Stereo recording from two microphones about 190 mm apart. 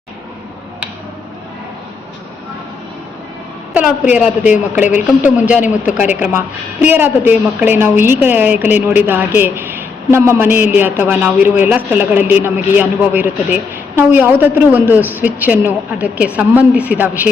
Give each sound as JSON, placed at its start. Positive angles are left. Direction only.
{"t": 3.8, "sound": "a man's voice", "side_deg": -5}
{"t": 4.9, "sound": "speech", "side_deg": 40}
{"t": 5.4, "sound": "a man's voice", "side_deg": -5}